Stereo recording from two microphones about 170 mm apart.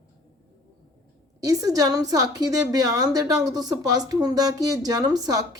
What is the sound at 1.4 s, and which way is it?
Speech, 20° right (ahead or behind).